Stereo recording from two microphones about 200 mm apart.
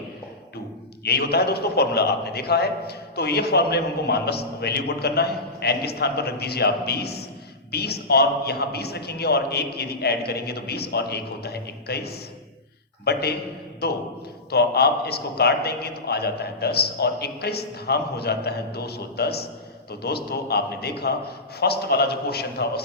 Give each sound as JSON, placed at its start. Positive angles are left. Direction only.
{"t": 1.0, "sound": "a man's voice", "side_deg": 55}